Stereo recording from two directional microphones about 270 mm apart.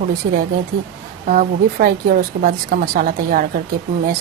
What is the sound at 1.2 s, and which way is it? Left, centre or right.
A woman's voice, right.